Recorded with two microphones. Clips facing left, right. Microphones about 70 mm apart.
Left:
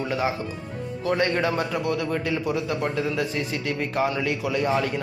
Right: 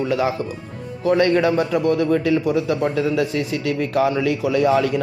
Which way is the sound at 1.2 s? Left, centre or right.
Right.